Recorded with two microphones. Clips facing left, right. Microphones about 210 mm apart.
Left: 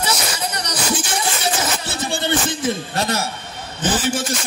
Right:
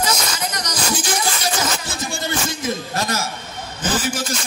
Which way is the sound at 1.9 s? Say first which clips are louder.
Left 4 dB; 30° left (ahead or behind).